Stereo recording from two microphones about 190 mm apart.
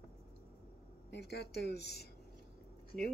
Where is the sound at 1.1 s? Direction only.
60° left (ahead or behind).